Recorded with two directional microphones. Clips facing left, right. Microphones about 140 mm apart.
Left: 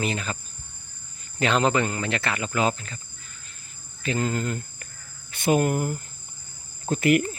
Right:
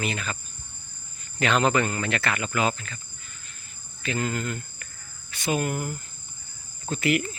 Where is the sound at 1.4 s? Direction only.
30° left (ahead or behind).